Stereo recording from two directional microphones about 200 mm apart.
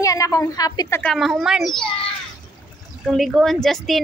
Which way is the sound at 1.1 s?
Centre (ahead or behind).